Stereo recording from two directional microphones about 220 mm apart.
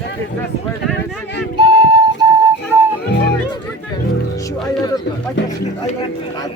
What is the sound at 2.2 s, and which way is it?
Flute, 20° right (ahead or behind).